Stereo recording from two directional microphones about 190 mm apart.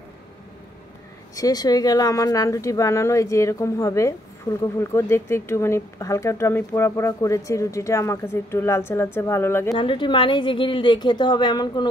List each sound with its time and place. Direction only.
1.3 s speech: 20° left (ahead or behind)
9.8 s a woman's voice: 25° left (ahead or behind)